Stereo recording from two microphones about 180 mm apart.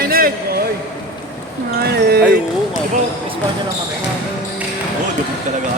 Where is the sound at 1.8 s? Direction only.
60° right (ahead or behind).